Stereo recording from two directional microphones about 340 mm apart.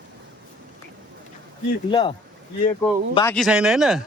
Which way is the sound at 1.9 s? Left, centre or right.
Centre.